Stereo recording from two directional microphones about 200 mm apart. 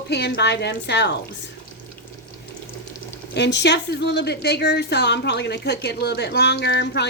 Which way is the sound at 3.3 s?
60° left (ahead or behind).